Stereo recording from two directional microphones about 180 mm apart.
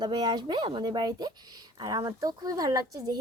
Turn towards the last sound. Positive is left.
turn(degrees=-20)  # may be behind; listen again after turning